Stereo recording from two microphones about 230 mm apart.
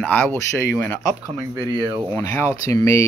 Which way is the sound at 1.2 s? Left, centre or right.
Centre.